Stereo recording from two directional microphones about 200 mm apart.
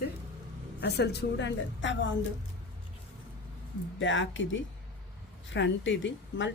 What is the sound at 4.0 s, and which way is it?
Speech, 70° left (ahead or behind).